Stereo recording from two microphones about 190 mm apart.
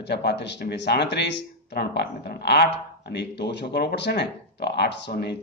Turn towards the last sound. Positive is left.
turn(degrees=60)  # may be behind; listen again after turning